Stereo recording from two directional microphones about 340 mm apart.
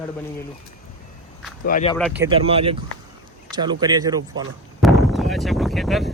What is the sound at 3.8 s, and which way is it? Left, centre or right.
Speech, centre.